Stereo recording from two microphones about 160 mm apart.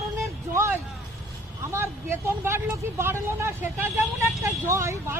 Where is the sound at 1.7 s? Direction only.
15° right (ahead or behind).